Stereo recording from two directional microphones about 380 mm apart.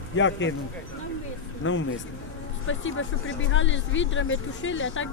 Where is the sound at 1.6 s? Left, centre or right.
Left.